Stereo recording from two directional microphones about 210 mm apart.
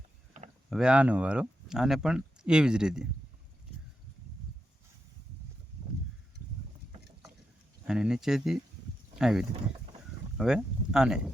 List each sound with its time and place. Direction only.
0.4 s rowboat: 35° right (ahead or behind)
0.7 s speech: 5° right (ahead or behind)
7.9 s speech: 5° right (ahead or behind)